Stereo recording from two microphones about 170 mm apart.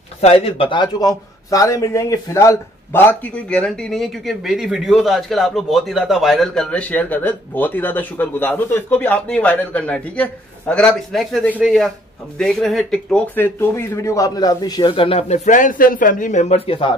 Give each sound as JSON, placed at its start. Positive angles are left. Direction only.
{"t": 0.2, "sound": "a man's voice", "side_deg": 35}